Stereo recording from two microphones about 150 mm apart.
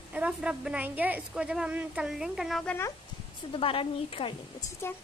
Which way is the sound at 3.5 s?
35° left (ahead or behind).